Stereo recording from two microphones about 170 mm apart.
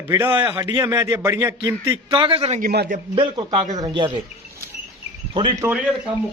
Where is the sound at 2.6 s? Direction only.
60° right (ahead or behind).